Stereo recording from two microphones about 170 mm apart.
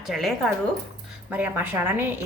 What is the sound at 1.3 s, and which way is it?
Speech, 10° right (ahead or behind).